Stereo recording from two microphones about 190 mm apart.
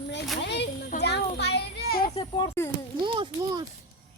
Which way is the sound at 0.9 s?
60° left (ahead or behind).